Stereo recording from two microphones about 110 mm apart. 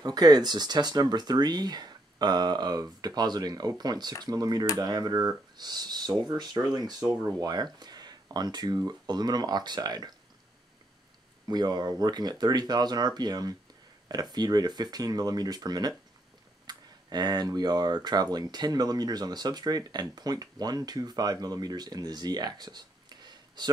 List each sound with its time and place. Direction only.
0.0 s speech: 40° right (ahead or behind)
11.4 s speech: 40° right (ahead or behind)